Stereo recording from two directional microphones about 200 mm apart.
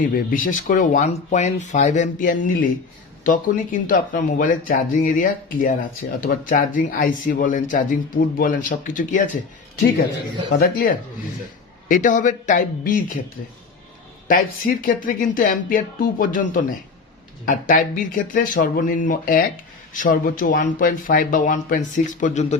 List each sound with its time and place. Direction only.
0.0 s speech: 45° left (ahead or behind)
10.6 s speech: 45° left (ahead or behind)
14.3 s speech: 45° left (ahead or behind)